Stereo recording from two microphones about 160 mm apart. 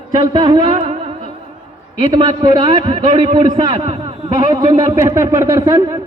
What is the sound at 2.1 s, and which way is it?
Speech, 25° right (ahead or behind).